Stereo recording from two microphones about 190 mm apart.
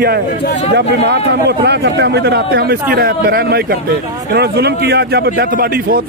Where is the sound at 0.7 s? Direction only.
65° right (ahead or behind).